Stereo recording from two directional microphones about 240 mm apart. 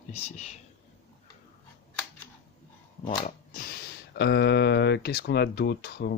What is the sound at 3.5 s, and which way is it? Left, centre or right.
Speech, left.